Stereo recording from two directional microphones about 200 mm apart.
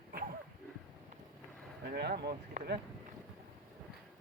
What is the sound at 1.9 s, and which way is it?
Speech, 55° right (ahead or behind).